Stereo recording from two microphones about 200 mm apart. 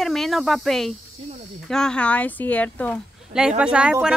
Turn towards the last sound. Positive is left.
turn(degrees=-5)  # may be behind; listen again after turning